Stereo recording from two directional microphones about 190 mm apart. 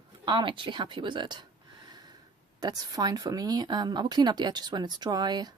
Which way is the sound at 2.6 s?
20° right (ahead or behind).